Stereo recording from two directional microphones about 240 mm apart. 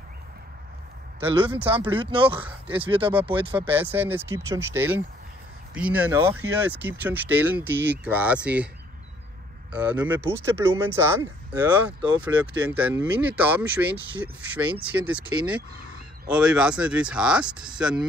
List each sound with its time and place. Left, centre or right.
1.5 s speech: centre
2.0 s speech: right
3.7 s speech: centre
9.7 s speech: centre